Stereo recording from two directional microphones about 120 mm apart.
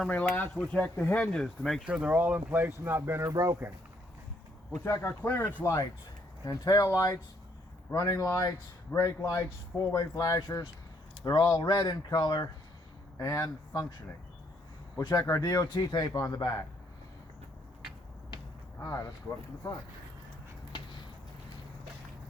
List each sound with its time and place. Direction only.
0.0 s speech: 10° left (ahead or behind)
1.8 s speech: 10° right (ahead or behind); by 3.7 s 25° right (ahead or behind)
4.8 s speech: 20° left (ahead or behind)
5.6 s speech: 30° left (ahead or behind)
14.9 s speech: 30° left (ahead or behind)
18.8 s speech: 30° left (ahead or behind)